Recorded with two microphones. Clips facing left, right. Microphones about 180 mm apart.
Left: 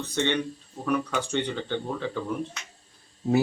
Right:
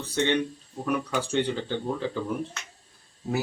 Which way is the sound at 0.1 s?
10° right (ahead or behind).